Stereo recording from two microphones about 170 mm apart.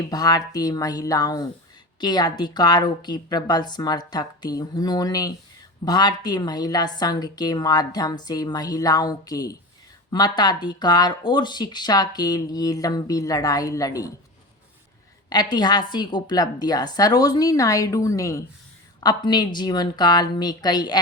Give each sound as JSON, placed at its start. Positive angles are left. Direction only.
{"t": 0.1, "sound": "speech", "side_deg": 20}
{"t": 15.3, "sound": "speech", "side_deg": 25}